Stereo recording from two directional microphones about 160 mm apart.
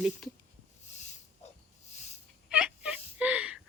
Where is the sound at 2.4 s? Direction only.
5° right (ahead or behind).